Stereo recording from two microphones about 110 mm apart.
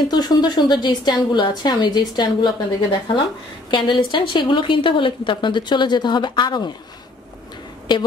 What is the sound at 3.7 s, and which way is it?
Speech, 45° left (ahead or behind).